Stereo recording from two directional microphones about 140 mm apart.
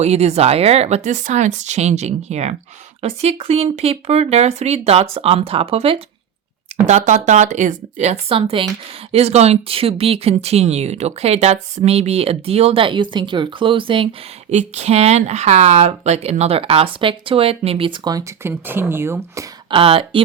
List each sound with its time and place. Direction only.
0.0 s speech: 50° right (ahead or behind)
6.8 s speech: 60° right (ahead or behind); by 14.1 s 40° right (ahead or behind)
14.5 s speech: 50° right (ahead or behind); by 19.5 s 15° right (ahead or behind)
19.7 s speech: 40° right (ahead or behind)